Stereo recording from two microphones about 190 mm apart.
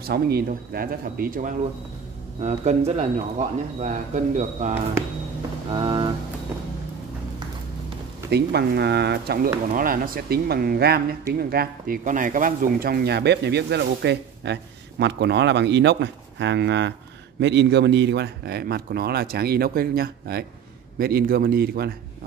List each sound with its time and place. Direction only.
0.0 s speech: 55° right (ahead or behind)
2.4 s speech: 35° right (ahead or behind)
5.7 s a sound: 25° right (ahead or behind)
8.3 s speech: 60° right (ahead or behind)